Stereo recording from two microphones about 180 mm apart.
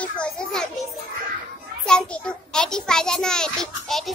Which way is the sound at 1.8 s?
5° left (ahead or behind).